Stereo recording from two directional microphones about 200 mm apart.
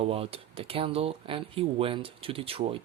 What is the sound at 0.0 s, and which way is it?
Speech, 30° right (ahead or behind).